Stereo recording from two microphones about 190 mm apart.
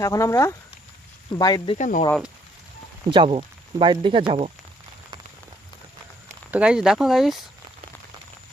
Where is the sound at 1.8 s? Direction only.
40° left (ahead or behind).